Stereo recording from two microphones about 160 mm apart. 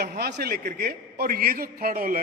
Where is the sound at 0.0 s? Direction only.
90° right.